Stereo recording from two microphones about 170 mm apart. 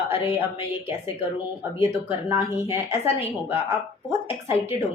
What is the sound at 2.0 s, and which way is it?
A woman's voice, 15° right (ahead or behind).